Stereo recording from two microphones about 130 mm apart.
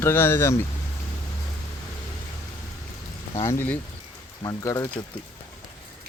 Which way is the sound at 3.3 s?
20° left (ahead or behind).